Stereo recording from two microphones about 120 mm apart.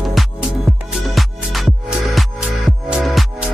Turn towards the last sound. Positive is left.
turn(degrees=0)  # may be behind; listen again after turning